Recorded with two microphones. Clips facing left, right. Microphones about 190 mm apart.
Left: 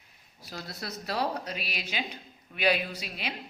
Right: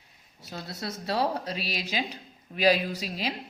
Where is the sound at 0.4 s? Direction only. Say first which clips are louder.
Right 3 dB; 25° right (ahead or behind).